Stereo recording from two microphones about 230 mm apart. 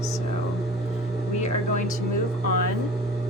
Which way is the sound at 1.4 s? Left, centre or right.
Left.